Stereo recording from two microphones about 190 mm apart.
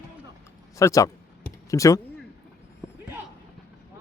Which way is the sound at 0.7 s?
15° left (ahead or behind).